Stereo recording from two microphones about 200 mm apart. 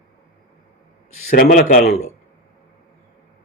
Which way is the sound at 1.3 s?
45° left (ahead or behind).